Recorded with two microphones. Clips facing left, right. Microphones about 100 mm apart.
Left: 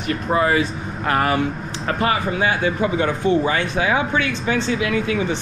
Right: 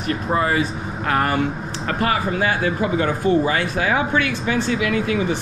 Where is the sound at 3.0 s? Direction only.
25° left (ahead or behind).